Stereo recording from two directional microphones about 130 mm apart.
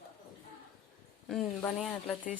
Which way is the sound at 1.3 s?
10° left (ahead or behind).